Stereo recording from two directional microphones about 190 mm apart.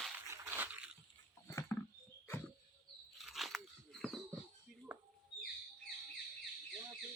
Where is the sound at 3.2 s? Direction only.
Centre (ahead or behind).